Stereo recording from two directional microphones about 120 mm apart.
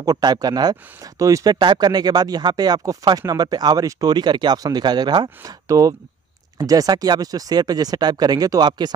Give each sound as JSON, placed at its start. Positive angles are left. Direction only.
{"t": 0.0, "sound": "speech", "side_deg": -30}